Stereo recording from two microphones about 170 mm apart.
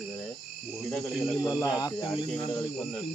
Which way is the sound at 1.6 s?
25° left (ahead or behind).